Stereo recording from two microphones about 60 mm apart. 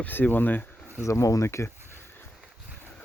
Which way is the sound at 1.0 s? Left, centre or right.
Left.